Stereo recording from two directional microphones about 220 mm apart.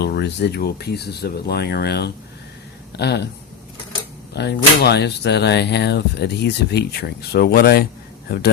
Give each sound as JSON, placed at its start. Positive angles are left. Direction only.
{"t": 0.0, "sound": "speech", "side_deg": 50}
{"t": 4.4, "sound": "speech", "side_deg": 50}